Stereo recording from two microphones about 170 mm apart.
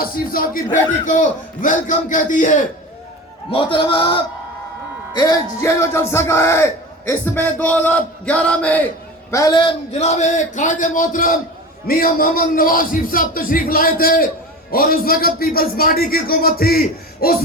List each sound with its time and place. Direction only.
0.0 s a man's voice: 55° left (ahead or behind)
3.5 s a man's voice: 30° left (ahead or behind); by 8.9 s 10° left (ahead or behind)
9.3 s a man's voice: 20° left (ahead or behind); by 17.3 s 60° left (ahead or behind)